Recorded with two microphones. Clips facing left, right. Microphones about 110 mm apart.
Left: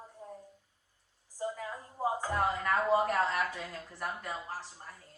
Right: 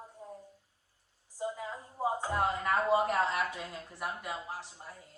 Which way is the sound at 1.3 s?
15° right (ahead or behind).